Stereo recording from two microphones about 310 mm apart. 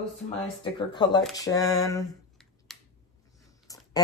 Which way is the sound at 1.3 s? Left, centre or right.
Centre.